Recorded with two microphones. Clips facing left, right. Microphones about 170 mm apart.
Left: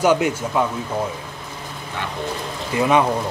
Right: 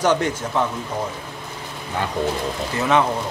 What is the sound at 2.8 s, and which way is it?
Speech, 15° left (ahead or behind).